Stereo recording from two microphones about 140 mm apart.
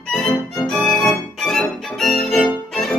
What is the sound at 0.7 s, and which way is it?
Music, 5° left (ahead or behind).